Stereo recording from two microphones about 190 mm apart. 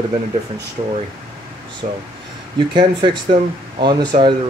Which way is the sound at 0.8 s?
35° right (ahead or behind).